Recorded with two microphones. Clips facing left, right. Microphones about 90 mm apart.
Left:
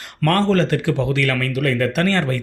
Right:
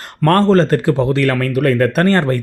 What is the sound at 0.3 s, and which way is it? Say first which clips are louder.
Speech: right 5 dB; 40° right (ahead or behind).